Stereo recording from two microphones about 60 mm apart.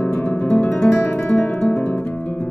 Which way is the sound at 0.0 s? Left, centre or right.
Left.